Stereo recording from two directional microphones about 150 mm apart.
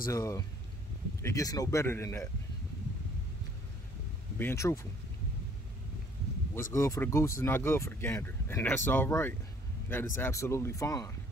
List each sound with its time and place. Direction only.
0.0 s speech: 20° left (ahead or behind)
4.4 s speech: 15° left (ahead or behind)
6.5 s speech: 20° left (ahead or behind)